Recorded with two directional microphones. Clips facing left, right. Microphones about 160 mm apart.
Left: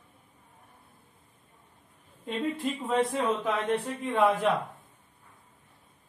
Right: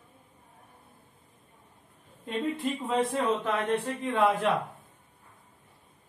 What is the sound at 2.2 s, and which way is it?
Speech, 5° left (ahead or behind).